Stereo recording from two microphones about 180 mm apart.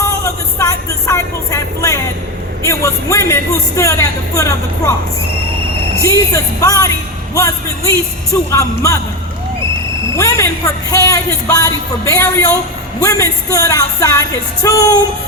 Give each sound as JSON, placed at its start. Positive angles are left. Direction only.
{"t": 0.6, "sound": "a sound", "side_deg": 15}
{"t": 2.6, "sound": "speech", "side_deg": 15}
{"t": 6.0, "sound": "speech", "side_deg": 15}
{"t": 10.2, "sound": "a woman's voice", "side_deg": 15}